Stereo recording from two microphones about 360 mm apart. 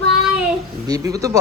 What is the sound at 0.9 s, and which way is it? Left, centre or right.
Speech, centre.